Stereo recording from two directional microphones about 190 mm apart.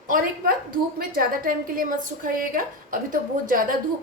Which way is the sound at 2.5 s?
45° right (ahead or behind).